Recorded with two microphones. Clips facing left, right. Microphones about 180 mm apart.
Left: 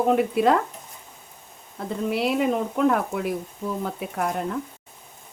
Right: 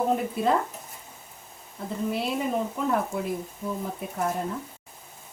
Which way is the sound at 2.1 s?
75° left (ahead or behind).